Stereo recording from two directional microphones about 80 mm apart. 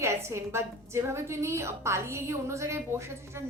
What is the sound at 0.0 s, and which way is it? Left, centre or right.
A woman's voice, right.